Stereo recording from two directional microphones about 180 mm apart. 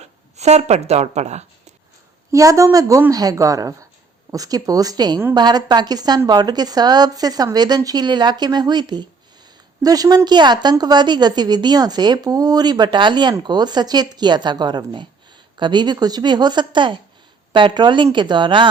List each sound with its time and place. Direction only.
0.0 s speech: 40° right (ahead or behind)
2.3 s a woman's voice: 20° right (ahead or behind)